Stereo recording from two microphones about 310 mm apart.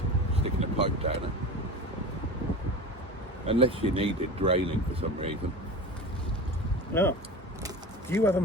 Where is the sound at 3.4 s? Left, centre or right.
Centre.